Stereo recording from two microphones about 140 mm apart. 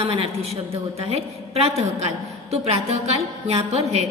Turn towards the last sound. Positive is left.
turn(degrees=-50)  # may be behind; listen again after turning